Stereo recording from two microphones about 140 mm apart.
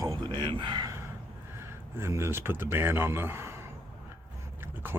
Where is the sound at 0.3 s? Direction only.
35° right (ahead or behind).